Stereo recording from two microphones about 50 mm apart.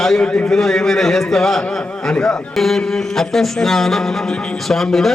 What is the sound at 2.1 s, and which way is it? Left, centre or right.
Speech, centre.